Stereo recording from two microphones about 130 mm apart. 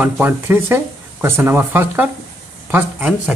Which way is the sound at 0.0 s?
15° right (ahead or behind).